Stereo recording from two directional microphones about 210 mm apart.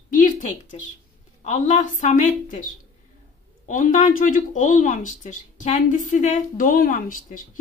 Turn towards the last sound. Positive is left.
turn(degrees=40)  # may be behind; listen again after turning